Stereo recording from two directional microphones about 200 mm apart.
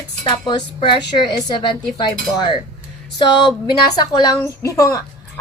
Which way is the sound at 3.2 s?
25° left (ahead or behind).